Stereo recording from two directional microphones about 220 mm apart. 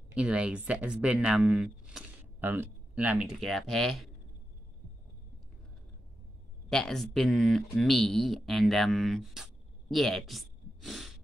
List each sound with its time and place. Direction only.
0.1 s speech: 5° right (ahead or behind)
6.7 s speech: centre (ahead or behind)